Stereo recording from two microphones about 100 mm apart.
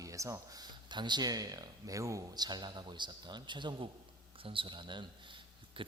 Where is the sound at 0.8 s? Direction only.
50° right (ahead or behind).